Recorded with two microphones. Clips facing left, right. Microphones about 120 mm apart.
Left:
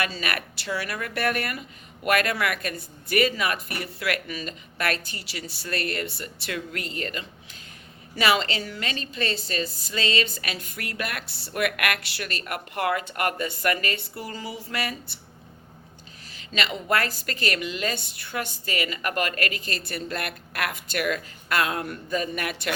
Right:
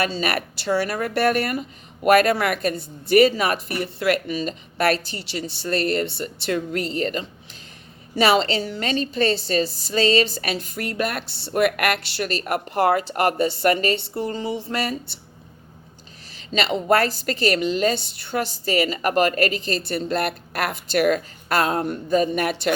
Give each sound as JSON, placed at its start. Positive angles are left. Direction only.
{"t": 0.0, "sound": "speech", "side_deg": -35}
{"t": 16.6, "sound": "speech", "side_deg": -30}